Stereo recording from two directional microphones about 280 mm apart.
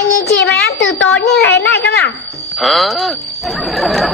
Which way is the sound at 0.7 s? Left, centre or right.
Left.